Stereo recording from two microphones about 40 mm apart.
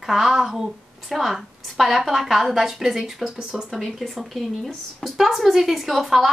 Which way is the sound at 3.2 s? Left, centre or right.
Centre.